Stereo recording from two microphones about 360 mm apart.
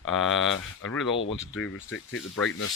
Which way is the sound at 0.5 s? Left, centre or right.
Left.